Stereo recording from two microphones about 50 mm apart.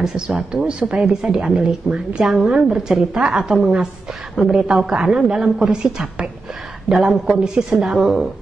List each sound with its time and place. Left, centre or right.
0.0 s a woman's voice: centre